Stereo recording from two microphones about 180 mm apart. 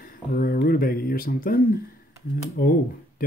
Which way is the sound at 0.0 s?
50° left (ahead or behind).